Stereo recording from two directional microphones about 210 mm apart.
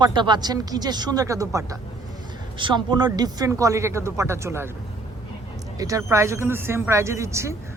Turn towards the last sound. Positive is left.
turn(degrees=-15)  # may be behind; listen again after turning